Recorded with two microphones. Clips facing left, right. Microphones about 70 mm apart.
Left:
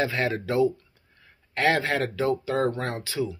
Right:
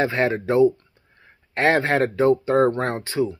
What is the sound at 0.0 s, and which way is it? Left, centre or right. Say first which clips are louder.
Speech: right 5 dB; right.